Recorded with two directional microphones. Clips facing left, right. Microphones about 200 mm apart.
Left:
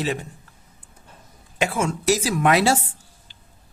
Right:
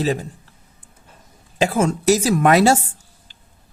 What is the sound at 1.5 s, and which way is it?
Speech, 35° right (ahead or behind).